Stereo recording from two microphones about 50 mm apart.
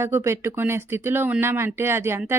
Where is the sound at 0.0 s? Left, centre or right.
Right.